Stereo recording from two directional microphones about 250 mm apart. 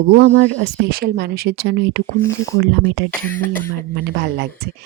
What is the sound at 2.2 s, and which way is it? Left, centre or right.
Speech, centre.